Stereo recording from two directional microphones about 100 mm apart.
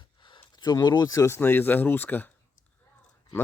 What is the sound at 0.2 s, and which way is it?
Speech, 55° left (ahead or behind).